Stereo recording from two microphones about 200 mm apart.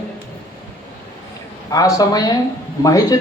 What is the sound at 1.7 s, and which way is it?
Speech, 15° left (ahead or behind).